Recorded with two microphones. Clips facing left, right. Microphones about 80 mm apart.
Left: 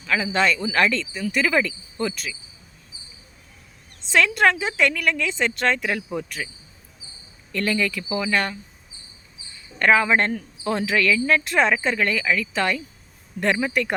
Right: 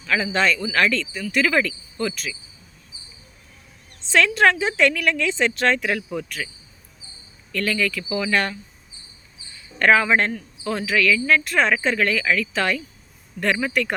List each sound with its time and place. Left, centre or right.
0.0 s speech: centre
4.1 s speech: centre
6.1 s speech: left
7.5 s speech: left
8.2 s speech: centre
9.9 s speech: centre
10.3 s speech: left
10.8 s speech: left
13.4 s speech: left
13.7 s speech: centre